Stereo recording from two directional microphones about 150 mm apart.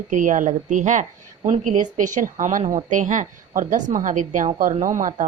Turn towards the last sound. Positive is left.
turn(degrees=-60)  # may be behind; listen again after turning